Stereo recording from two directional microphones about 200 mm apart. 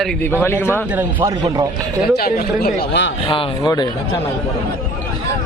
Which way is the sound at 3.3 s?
20° left (ahead or behind).